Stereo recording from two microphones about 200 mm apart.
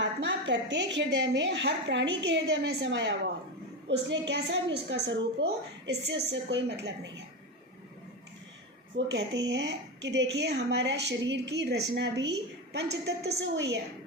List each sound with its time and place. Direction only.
0.0 s speech: 65° right (ahead or behind)
9.0 s speech: 60° right (ahead or behind)